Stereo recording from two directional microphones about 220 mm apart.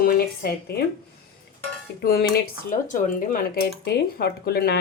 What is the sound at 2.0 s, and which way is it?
Speech, 45° left (ahead or behind).